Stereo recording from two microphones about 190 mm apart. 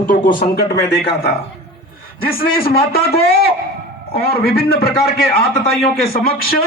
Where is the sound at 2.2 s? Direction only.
50° left (ahead or behind).